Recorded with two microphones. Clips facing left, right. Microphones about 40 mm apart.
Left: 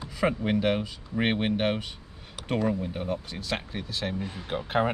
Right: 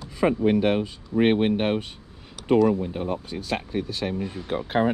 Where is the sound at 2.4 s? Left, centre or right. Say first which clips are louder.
Right 10 dB; centre.